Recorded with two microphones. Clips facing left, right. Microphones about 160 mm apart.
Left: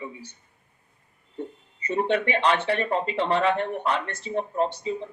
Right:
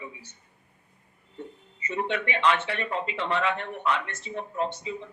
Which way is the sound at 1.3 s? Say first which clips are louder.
Left 5 dB; 35° left (ahead or behind).